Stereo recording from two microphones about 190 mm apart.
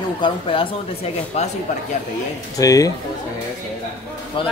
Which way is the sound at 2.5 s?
20° left (ahead or behind).